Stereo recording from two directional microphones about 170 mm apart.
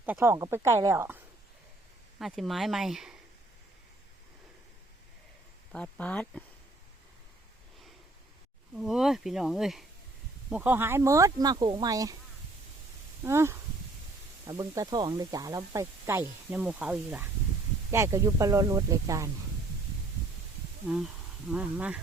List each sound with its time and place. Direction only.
0.0 s a woman's voice: 10° right (ahead or behind)
2.1 s speech: centre (ahead or behind)
5.7 s speech: 10° left (ahead or behind)
8.7 s speech: 5° right (ahead or behind); by 12.1 s 20° right (ahead or behind)
13.2 s a woman's voice: 15° right (ahead or behind)
20.8 s a woman's voice: 5° right (ahead or behind)